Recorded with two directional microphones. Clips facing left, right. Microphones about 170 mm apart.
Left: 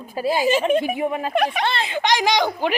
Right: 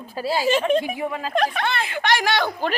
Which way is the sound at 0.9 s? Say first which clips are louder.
Left 4 dB; 20° left (ahead or behind).